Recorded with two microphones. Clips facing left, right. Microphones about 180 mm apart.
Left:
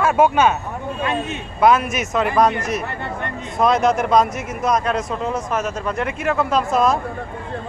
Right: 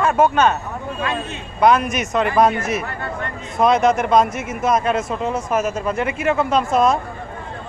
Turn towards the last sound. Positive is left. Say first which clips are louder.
# right 1 dB
turn(degrees=0)  # may be behind; listen again after turning